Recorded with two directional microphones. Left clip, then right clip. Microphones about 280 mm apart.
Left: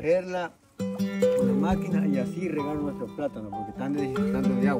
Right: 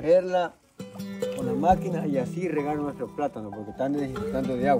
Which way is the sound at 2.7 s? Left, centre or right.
Right.